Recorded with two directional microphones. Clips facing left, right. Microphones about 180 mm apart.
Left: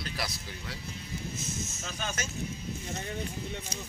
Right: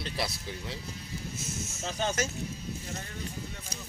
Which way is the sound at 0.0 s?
25° right (ahead or behind).